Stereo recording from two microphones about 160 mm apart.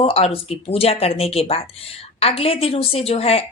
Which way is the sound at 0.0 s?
40° left (ahead or behind).